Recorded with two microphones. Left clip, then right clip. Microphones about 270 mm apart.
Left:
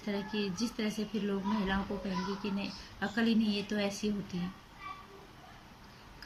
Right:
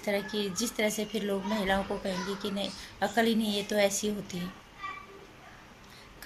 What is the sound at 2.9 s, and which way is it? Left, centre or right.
A woman's voice, right.